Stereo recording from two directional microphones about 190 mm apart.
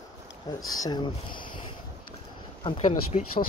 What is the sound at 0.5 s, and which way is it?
Speech, 20° left (ahead or behind).